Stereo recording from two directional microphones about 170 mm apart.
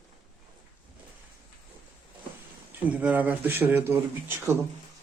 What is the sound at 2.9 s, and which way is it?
Speech, 10° right (ahead or behind).